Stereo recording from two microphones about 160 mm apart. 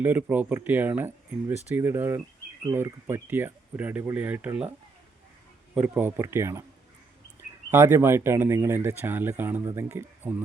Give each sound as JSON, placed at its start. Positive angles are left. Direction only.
{"t": 0.0, "sound": "speech", "side_deg": -10}
{"t": 5.7, "sound": "speech", "side_deg": -10}
{"t": 7.7, "sound": "speech", "side_deg": -15}